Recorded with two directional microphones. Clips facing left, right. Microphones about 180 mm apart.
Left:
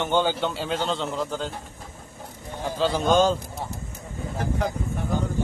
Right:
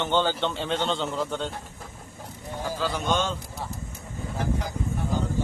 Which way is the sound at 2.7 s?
25° left (ahead or behind).